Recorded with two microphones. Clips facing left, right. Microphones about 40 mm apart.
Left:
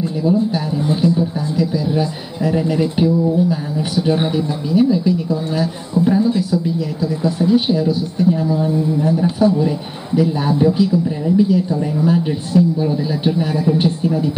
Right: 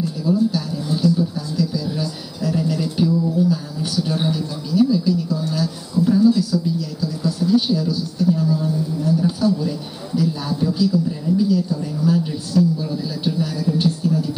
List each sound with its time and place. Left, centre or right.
0.0 s a man's voice: left